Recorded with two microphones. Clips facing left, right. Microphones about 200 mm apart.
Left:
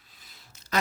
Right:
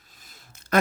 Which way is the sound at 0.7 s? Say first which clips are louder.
Right 7 dB; 55° right (ahead or behind).